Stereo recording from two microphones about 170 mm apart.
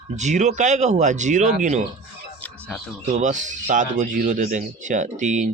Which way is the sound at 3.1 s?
45° right (ahead or behind).